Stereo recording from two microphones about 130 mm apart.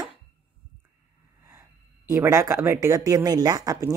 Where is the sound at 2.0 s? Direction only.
20° right (ahead or behind).